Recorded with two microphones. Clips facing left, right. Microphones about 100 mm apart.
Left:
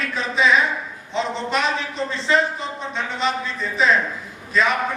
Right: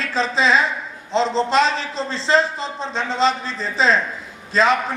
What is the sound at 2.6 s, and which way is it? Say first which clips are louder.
A man's voice: right 2 dB; 30° right (ahead or behind).